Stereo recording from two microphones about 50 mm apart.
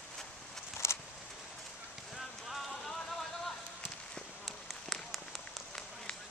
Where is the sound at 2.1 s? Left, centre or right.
Centre.